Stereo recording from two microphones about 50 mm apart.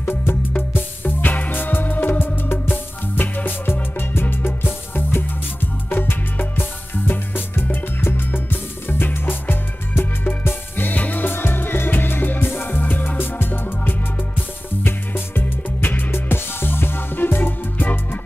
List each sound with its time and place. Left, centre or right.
0.0 s music: left